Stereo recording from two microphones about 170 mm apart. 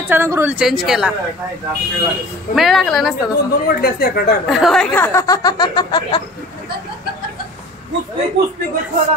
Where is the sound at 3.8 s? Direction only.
60° left (ahead or behind).